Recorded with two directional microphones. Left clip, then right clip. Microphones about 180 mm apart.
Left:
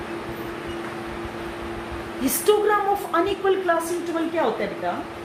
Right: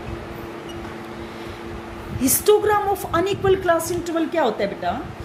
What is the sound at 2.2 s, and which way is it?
A woman's voice, 50° right (ahead or behind).